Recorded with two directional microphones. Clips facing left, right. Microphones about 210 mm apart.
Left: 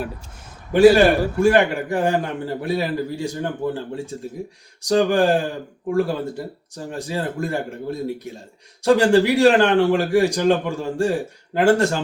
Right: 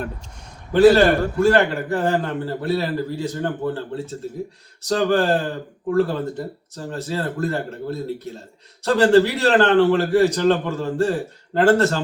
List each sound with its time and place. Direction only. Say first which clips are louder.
0.7 s a man's voice: left 1 dB; 15° left (ahead or behind)